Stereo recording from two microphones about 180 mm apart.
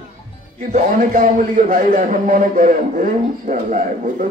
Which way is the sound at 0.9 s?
50° right (ahead or behind).